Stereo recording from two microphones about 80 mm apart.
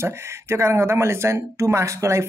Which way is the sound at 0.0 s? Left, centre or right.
Right.